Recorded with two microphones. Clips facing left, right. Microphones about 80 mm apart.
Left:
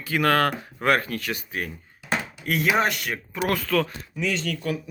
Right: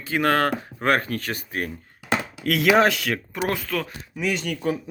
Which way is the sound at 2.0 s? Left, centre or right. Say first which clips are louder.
Right 3 dB; right.